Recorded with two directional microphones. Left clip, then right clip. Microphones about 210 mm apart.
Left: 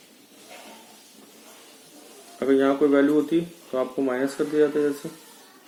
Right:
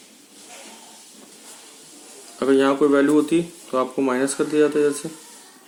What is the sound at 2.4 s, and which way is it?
Speech, 40° right (ahead or behind).